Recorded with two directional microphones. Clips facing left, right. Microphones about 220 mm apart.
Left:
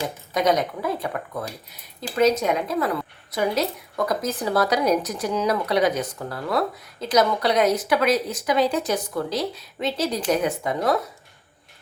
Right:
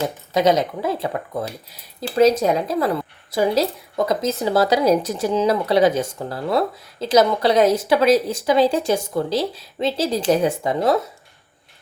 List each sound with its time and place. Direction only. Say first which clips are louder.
0.3 s a woman's voice: right 4 dB; 25° right (ahead or behind)